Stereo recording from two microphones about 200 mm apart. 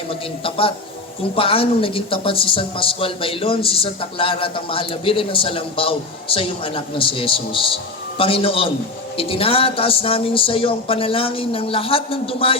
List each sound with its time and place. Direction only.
0.1 s speech: 25° left (ahead or behind)